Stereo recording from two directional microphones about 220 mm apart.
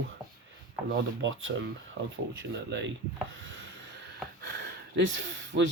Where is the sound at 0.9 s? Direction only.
60° right (ahead or behind).